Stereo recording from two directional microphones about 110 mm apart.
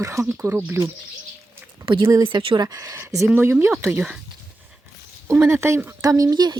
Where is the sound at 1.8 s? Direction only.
45° right (ahead or behind); by 4.2 s 15° right (ahead or behind).